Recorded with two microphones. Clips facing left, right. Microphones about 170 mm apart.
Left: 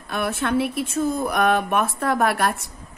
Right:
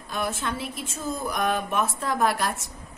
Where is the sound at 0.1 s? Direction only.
65° left (ahead or behind).